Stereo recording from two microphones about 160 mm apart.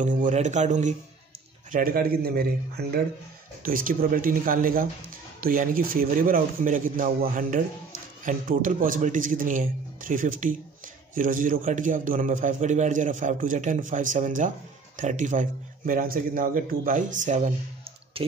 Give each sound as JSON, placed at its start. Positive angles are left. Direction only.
{"t": 0.2, "sound": "a man's voice", "side_deg": -50}
{"t": 1.7, "sound": "speech", "side_deg": -60}
{"t": 3.6, "sound": "a man's voice", "side_deg": -60}